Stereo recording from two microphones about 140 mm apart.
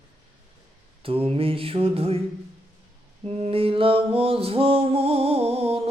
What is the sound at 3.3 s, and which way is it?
Music, 45° right (ahead or behind).